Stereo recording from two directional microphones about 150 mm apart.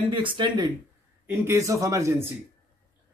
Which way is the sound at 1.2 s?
20° right (ahead or behind).